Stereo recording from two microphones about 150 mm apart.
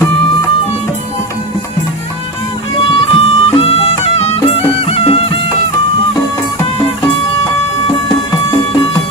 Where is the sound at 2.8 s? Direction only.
40° left (ahead or behind).